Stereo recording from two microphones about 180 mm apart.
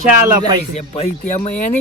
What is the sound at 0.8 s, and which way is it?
Speech, 35° left (ahead or behind).